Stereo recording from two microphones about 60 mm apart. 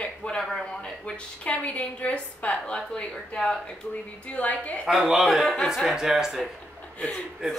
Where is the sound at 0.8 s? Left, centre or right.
Centre.